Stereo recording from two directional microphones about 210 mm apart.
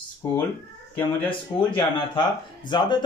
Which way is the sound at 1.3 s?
20° left (ahead or behind).